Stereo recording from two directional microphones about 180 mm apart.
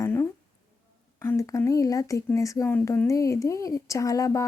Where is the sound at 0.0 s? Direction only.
15° left (ahead or behind).